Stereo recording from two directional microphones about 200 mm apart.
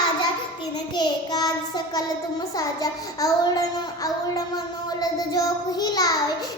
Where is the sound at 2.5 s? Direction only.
15° left (ahead or behind).